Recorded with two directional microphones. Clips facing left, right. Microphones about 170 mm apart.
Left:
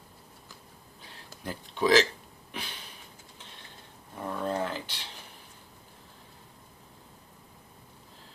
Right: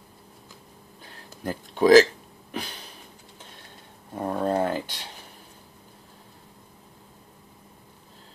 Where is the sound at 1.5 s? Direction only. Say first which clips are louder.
Right 8 dB; 50° right (ahead or behind).